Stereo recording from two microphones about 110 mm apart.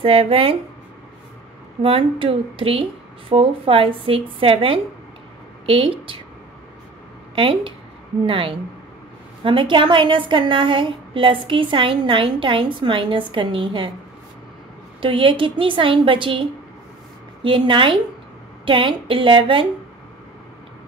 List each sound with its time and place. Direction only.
0.0 s a woman's voice: 60° right (ahead or behind)
1.8 s a woman's voice: 55° right (ahead or behind)
7.3 s a woman's voice: 50° right (ahead or behind)
15.0 s a woman's voice: 50° right (ahead or behind)